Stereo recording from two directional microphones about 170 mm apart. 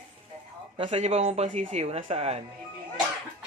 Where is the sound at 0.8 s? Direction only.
40° right (ahead or behind).